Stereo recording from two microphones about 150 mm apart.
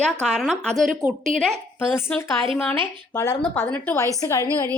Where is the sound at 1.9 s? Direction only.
15° left (ahead or behind).